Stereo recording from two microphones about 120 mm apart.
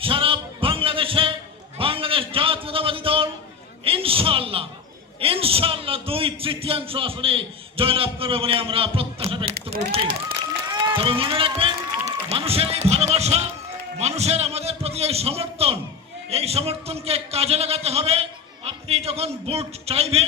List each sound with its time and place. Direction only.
0.0 s music: 50° right (ahead or behind)
1.8 s a sound: 50° right (ahead or behind)
5.2 s a man's voice: 50° right (ahead or behind)
10.7 s run: 45° right (ahead or behind); by 13.5 s 65° right (ahead or behind)
14.0 s a sound: 65° right (ahead or behind)
16.3 s a man's voice: 60° right (ahead or behind)